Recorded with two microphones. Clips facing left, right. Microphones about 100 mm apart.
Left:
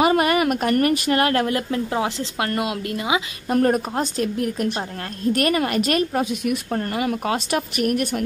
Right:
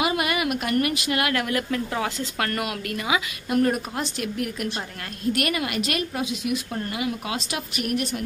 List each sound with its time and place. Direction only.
0.0 s a woman's voice: 40° left (ahead or behind); by 3.2 s 25° left (ahead or behind)
3.4 s a woman's voice: 40° left (ahead or behind)